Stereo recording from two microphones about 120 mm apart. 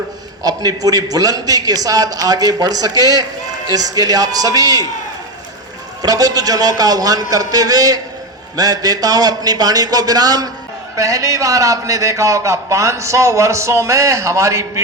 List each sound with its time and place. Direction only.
0.4 s a man's voice: 30° right (ahead or behind)
6.0 s a man's voice: 30° right (ahead or behind)